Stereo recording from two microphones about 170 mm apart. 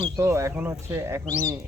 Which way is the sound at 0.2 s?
15° right (ahead or behind).